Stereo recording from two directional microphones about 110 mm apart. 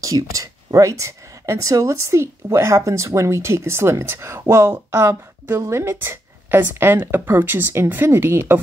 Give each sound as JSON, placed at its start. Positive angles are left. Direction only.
{"t": 0.0, "sound": "speech", "side_deg": -30}